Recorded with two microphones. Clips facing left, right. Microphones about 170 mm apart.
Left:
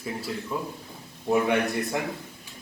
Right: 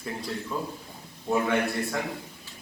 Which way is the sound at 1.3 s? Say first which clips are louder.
Left 2 dB; 15° left (ahead or behind).